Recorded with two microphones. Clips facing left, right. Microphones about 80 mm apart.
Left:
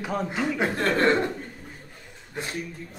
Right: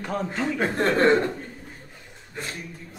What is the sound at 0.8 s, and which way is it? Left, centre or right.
Speech, right.